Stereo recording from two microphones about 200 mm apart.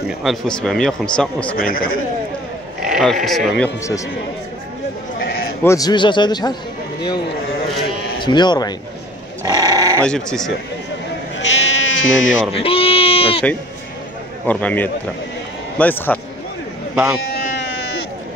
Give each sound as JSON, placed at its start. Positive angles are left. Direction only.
{"t": 0.2, "sound": "a man's voice", "side_deg": 0}
{"t": 1.6, "sound": "speech", "side_deg": 45}
{"t": 2.8, "sound": "sheep", "side_deg": 0}
{"t": 3.3, "sound": "a man's voice", "side_deg": 0}
{"t": 5.2, "sound": "sheep", "side_deg": 50}
{"t": 5.6, "sound": "a man's voice", "side_deg": 15}
{"t": 8.2, "sound": "a man's voice", "side_deg": 20}
{"t": 9.4, "sound": "sheep", "side_deg": -20}
{"t": 10.0, "sound": "a man's voice", "side_deg": 5}
{"t": 11.3, "sound": "sheep", "side_deg": 70}
{"t": 12.5, "sound": "sheep", "side_deg": 30}
{"t": 14.4, "sound": "speech", "side_deg": 5}
{"t": 16.9, "sound": "speech", "side_deg": -10}
{"t": 17.3, "sound": "a sound", "side_deg": 50}